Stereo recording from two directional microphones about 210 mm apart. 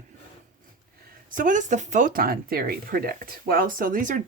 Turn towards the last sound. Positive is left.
turn(degrees=-40)  # may be behind; listen again after turning